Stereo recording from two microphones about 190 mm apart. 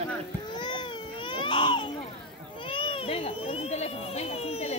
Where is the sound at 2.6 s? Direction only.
25° left (ahead or behind).